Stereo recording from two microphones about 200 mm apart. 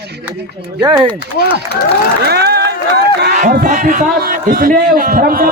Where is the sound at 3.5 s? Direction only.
45° right (ahead or behind).